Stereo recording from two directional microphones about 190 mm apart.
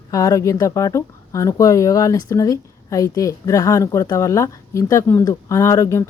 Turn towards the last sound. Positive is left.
turn(degrees=15)  # may be behind; listen again after turning